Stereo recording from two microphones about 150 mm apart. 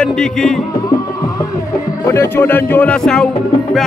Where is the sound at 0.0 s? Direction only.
5° left (ahead or behind).